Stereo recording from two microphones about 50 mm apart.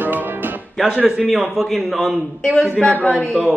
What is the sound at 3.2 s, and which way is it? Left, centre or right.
Speech, right.